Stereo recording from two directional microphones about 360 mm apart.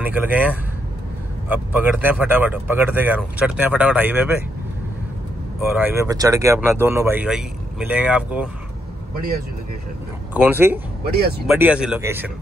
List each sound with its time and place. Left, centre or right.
0.0 s speech: centre
5.7 s speech: centre
10.3 s speech: centre
11.1 s speech: right
11.4 s speech: centre